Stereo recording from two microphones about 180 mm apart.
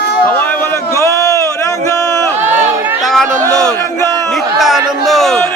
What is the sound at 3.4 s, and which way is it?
Speech, 5° left (ahead or behind).